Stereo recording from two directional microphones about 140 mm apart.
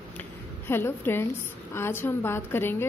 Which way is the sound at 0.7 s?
15° left (ahead or behind).